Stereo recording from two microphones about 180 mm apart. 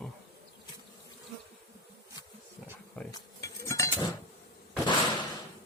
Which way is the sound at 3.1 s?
20° left (ahead or behind).